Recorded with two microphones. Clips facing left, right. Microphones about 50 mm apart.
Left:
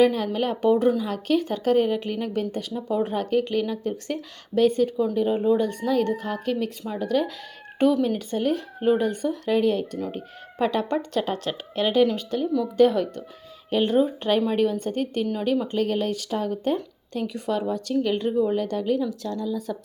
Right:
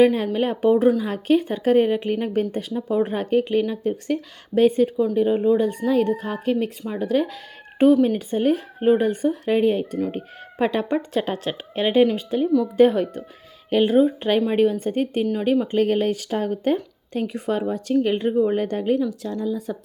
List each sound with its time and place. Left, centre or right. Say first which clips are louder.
0.0 s a woman's voice: right 3 dB; right
5.2 s a woman's voice: right 3 dB; centre
8.4 s a woman's voice: right 6 dB; right
15.8 s speech: right 4 dB; right
17.2 s speech: right 2 dB; centre
18.9 s speech: right 3 dB; centre
19.3 s a woman's voice: right 2 dB; centre